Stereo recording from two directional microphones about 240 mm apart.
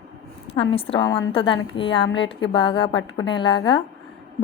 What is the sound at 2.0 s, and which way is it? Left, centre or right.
Speech, left.